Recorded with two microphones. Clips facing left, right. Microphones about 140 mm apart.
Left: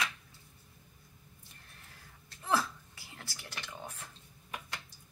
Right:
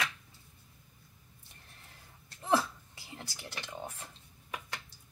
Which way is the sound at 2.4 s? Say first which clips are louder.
Right 3 dB; 25° right (ahead or behind).